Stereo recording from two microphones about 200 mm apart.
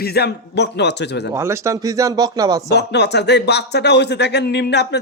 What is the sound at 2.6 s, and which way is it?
Speech, 55° left (ahead or behind).